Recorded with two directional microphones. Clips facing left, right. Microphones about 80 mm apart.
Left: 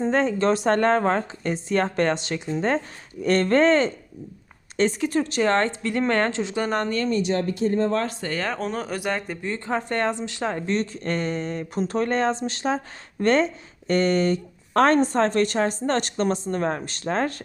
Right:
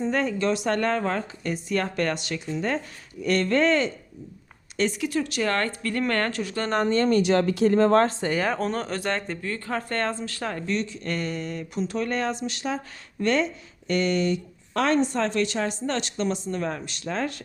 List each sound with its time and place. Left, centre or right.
0.0 s speech: left
7.1 s speech: right
8.2 s speech: centre
9.4 s speech: left
10.7 s speech: left